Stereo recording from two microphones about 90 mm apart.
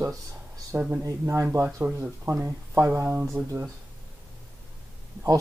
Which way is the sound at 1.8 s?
25° right (ahead or behind).